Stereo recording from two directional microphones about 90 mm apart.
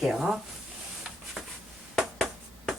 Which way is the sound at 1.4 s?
Centre (ahead or behind).